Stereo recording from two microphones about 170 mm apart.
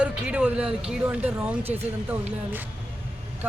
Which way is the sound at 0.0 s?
5° right (ahead or behind).